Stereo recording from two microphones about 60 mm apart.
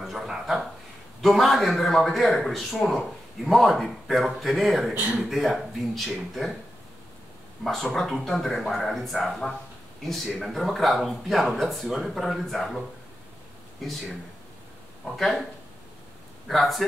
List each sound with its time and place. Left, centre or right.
0.0 s a sound: centre
1.2 s speech: centre
4.9 s speech: centre
5.2 s speech: centre
7.6 s speech: centre
15.0 s speech: centre
16.4 s speech: centre